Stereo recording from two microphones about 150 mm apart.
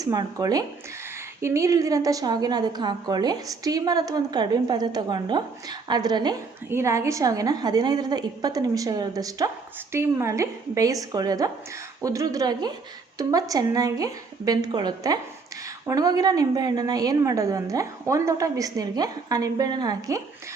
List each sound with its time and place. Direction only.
0.0 s a woman's voice: 25° right (ahead or behind)
6.7 s a woman's voice: 20° right (ahead or behind)